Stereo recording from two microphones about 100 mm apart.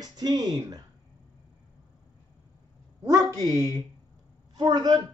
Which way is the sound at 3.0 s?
40° right (ahead or behind).